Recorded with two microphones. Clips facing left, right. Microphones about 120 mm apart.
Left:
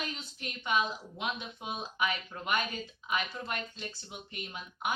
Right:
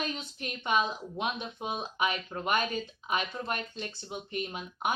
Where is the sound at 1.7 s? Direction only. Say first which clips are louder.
Right 1 dB; 25° right (ahead or behind).